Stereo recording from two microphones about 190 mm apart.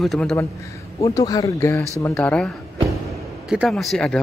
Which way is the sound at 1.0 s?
20° left (ahead or behind).